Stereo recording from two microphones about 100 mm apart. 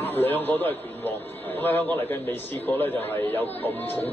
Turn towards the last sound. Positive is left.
turn(degrees=20)  # may be behind; listen again after turning